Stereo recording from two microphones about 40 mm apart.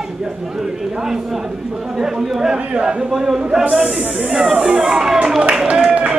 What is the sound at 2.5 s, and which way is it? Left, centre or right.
A man's voice, right.